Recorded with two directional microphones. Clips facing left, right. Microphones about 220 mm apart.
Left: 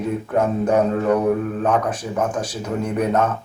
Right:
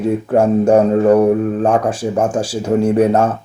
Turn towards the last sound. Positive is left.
turn(degrees=-30)  # may be behind; listen again after turning